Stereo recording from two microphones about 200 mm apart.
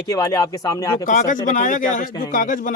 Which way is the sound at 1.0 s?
40° left (ahead or behind).